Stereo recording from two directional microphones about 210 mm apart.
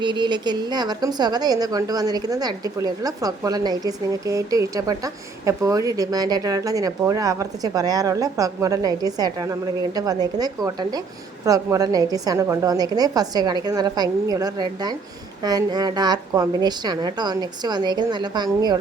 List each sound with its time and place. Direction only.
0.0 s a woman's voice: 20° right (ahead or behind)